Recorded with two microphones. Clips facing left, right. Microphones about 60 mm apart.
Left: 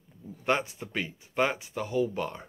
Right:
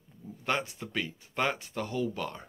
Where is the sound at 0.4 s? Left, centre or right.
Left.